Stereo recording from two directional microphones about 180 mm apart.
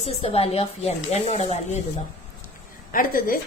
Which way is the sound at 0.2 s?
30° left (ahead or behind).